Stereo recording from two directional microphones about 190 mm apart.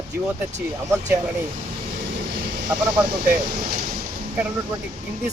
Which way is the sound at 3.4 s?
50° right (ahead or behind).